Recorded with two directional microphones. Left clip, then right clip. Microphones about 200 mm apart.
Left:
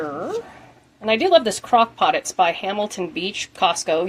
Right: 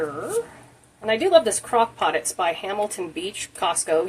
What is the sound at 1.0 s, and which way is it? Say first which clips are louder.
Speech: left 2 dB; 45° left (ahead or behind).